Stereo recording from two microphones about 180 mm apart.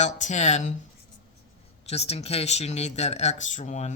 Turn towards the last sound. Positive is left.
turn(degrees=40)  # may be behind; listen again after turning